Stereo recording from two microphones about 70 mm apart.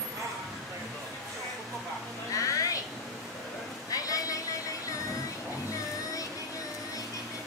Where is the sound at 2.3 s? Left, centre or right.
Left.